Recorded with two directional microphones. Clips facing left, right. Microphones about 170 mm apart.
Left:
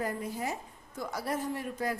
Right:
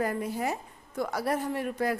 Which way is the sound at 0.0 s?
65° right (ahead or behind).